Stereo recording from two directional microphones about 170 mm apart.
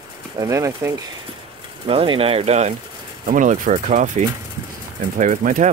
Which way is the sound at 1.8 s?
35° right (ahead or behind).